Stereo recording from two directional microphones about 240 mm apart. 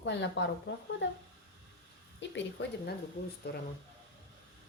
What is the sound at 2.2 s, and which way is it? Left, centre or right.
Speech, left.